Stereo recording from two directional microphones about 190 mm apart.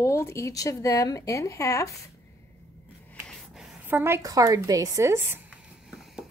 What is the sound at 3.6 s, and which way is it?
A woman's voice, 10° right (ahead or behind).